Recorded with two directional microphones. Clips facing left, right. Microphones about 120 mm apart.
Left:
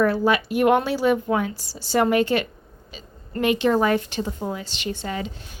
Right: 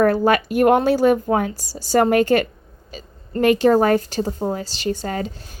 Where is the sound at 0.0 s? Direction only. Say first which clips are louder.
Right 4 dB; 50° right (ahead or behind).